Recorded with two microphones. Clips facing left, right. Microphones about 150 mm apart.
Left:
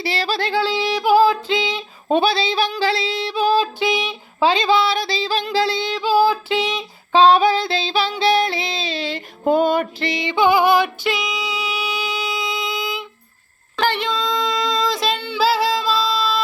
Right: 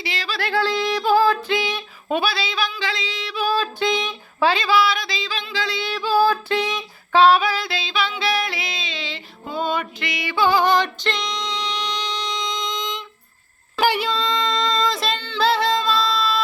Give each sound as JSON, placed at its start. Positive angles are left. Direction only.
{"t": 0.0, "sound": "female singing", "side_deg": 35}
{"t": 0.5, "sound": "female singing", "side_deg": 10}
{"t": 10.0, "sound": "music", "side_deg": 25}
{"t": 13.7, "sound": "a sound", "side_deg": -5}